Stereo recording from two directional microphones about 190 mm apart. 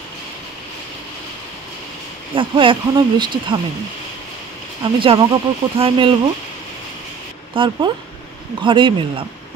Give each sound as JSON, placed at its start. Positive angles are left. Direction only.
{"t": 2.3, "sound": "speech", "side_deg": -25}
{"t": 5.0, "sound": "speech", "side_deg": -30}
{"t": 7.5, "sound": "speech", "side_deg": -25}